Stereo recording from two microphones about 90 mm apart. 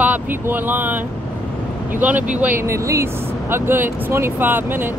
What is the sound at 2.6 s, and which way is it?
Speech, 30° right (ahead or behind).